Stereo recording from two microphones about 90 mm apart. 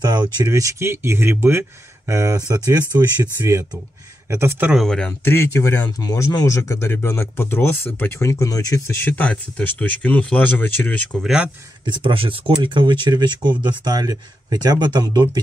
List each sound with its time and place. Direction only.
0.0 s a sound: 50° right (ahead or behind)
0.5 s speech: 35° right (ahead or behind)
4.3 s speech: 30° right (ahead or behind)
4.8 s speech: 10° left (ahead or behind)
5.2 s speech: 30° left (ahead or behind)
5.9 s speech: 45° left (ahead or behind)
9.0 s speech: 15° left (ahead or behind)
11.2 s speech: 10° right (ahead or behind)
11.8 s speech: 65° right (ahead or behind); by 15.4 s 50° right (ahead or behind)